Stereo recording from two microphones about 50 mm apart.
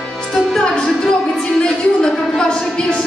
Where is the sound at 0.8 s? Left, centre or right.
Centre.